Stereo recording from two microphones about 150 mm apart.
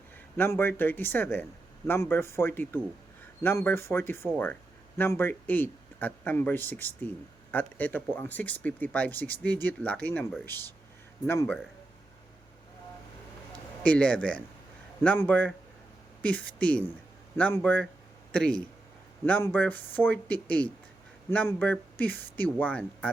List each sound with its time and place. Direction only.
0.3 s speech: 15° left (ahead or behind)
13.8 s speech: 10° left (ahead or behind)